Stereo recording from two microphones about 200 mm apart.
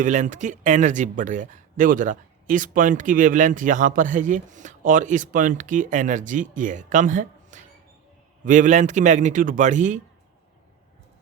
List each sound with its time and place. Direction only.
0.0 s a man's voice: 40° right (ahead or behind)